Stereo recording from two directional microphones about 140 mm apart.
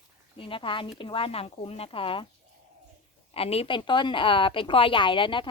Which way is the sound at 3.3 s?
45° left (ahead or behind).